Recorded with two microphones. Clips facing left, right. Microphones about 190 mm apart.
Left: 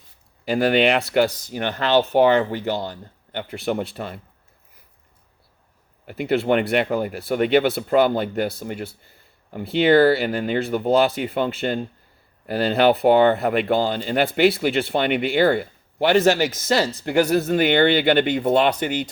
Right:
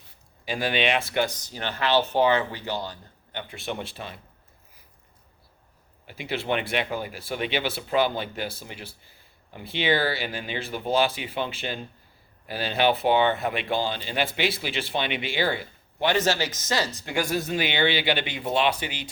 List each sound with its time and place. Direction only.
0.5 s speech: 60° left (ahead or behind)
1.5 s speech: 15° left (ahead or behind)
3.9 s speech: 55° left (ahead or behind)
6.1 s speech: 55° left (ahead or behind)
16.0 s speech: 15° left (ahead or behind)
17.0 s speech: 60° left (ahead or behind)